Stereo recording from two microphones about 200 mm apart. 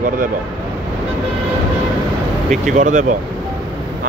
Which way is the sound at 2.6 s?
40° right (ahead or behind).